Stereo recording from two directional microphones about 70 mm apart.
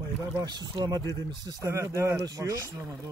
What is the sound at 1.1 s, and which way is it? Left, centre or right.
Speech, right.